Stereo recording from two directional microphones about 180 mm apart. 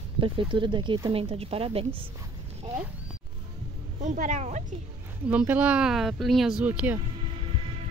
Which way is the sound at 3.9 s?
45° right (ahead or behind).